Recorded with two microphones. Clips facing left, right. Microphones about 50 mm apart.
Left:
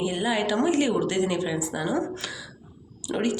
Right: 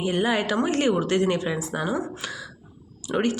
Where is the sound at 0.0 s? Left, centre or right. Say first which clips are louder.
Right 2 dB; right.